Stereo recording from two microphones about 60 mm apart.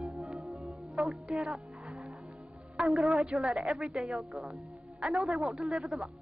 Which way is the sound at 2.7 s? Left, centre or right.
Centre.